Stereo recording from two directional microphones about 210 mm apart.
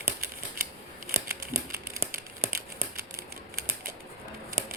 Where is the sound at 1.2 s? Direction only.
15° right (ahead or behind).